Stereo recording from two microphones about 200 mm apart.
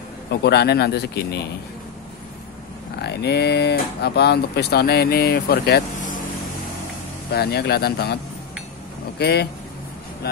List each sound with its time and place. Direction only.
0.3 s speech: 55° left (ahead or behind)
3.0 s speech: 55° left (ahead or behind)
7.2 s speech: 55° left (ahead or behind)
9.2 s speech: 55° left (ahead or behind)